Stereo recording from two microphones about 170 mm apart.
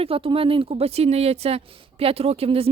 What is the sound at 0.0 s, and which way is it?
Speech, 35° right (ahead or behind).